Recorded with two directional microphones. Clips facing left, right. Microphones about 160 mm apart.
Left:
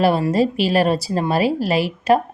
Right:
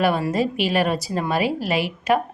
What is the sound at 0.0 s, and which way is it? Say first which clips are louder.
A woman's voice: left 4 dB; 30° left (ahead or behind).